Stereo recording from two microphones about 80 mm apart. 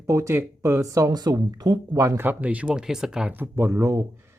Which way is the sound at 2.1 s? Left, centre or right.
Right.